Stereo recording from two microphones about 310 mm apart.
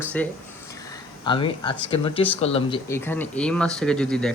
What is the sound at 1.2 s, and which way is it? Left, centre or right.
Speech, centre.